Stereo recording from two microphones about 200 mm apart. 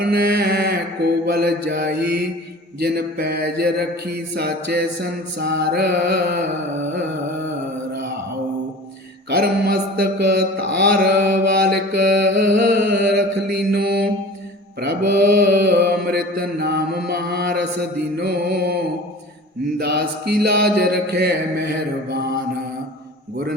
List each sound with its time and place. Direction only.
0.0 s mantra: 50° right (ahead or behind)
9.3 s mantra: 50° right (ahead or behind)
19.8 s mantra: 55° right (ahead or behind)